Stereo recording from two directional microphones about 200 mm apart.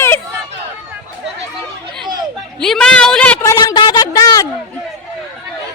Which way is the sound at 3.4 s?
15° left (ahead or behind).